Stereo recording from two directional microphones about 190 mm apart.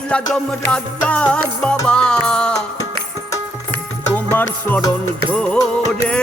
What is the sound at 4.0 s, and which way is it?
Music, 10° left (ahead or behind).